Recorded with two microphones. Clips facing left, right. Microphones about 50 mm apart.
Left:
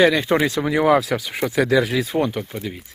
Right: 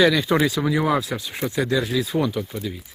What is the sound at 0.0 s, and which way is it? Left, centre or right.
Speech, left.